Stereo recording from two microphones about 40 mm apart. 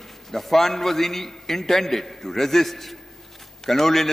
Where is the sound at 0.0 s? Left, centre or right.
Centre.